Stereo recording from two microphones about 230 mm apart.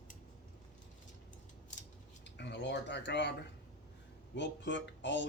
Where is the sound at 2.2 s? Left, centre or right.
Left.